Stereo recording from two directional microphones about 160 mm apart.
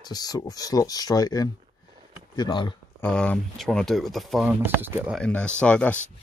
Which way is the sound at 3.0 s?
10° left (ahead or behind).